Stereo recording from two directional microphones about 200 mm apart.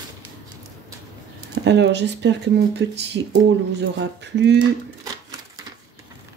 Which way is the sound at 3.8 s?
60° right (ahead or behind).